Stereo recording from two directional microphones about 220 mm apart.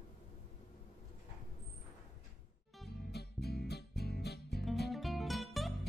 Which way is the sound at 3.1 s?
45° left (ahead or behind).